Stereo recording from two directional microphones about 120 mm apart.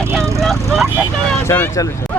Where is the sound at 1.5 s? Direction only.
25° left (ahead or behind).